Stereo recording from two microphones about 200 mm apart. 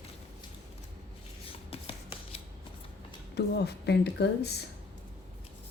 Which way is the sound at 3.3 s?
55° left (ahead or behind).